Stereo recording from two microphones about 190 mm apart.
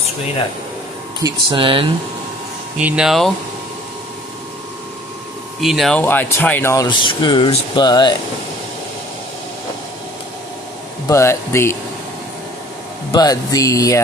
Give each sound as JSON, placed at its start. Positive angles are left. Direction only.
{"t": 1.2, "sound": "speech", "side_deg": -25}
{"t": 2.8, "sound": "speech", "side_deg": -5}
{"t": 5.6, "sound": "speech", "side_deg": 0}
{"t": 11.1, "sound": "speech", "side_deg": 15}
{"t": 13.1, "sound": "speech", "side_deg": 20}